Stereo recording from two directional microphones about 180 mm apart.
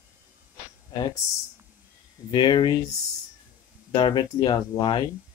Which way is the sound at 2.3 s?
25° left (ahead or behind).